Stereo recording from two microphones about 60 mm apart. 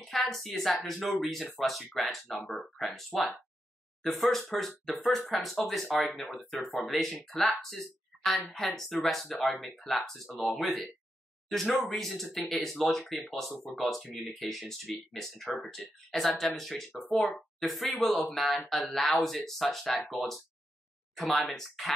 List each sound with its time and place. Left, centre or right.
0.0 s speech: centre